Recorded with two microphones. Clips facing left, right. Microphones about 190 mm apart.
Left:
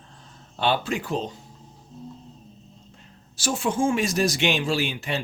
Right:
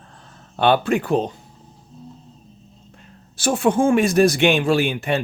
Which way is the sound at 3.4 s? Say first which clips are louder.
Right 6 dB; 60° right (ahead or behind).